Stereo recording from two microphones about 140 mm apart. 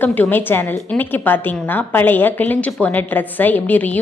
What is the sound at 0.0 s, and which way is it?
A woman's voice, 10° left (ahead or behind).